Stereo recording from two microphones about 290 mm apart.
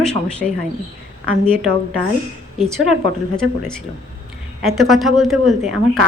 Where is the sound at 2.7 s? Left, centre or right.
Centre.